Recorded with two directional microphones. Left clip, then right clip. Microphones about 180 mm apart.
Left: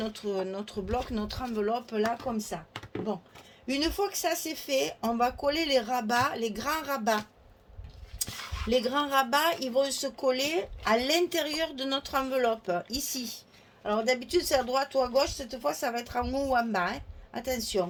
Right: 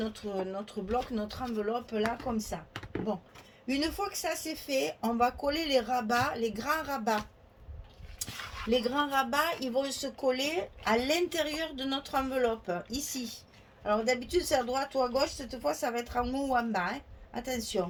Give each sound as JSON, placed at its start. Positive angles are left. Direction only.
{"t": 0.0, "sound": "speech", "side_deg": 50}
{"t": 2.7, "sound": "a sound", "side_deg": 10}
{"t": 3.7, "sound": "speech", "side_deg": 45}
{"t": 8.7, "sound": "speech", "side_deg": 50}